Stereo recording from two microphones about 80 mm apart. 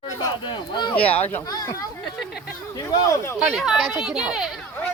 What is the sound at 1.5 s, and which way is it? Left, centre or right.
Speech, left.